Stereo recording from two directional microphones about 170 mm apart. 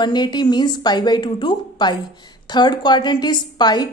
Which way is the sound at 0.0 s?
25° left (ahead or behind).